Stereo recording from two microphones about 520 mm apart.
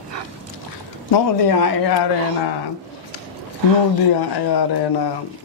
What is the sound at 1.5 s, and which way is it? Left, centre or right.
Speech, left.